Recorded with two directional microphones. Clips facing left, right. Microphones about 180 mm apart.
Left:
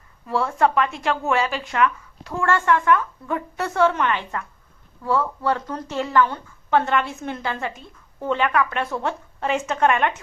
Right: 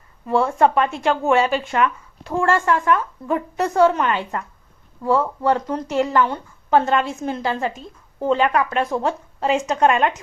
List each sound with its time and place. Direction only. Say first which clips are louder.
0.3 s a woman's voice: right 3 dB; 25° right (ahead or behind)
5.5 s speech: right 4 dB; 20° right (ahead or behind)
6.7 s a woman's voice: right 3 dB; 35° right (ahead or behind)